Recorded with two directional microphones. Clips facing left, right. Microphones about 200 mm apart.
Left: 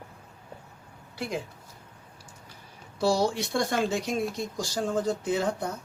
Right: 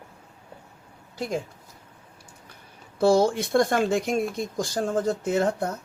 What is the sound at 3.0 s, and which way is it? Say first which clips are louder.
Speech: right 5 dB; 50° right (ahead or behind).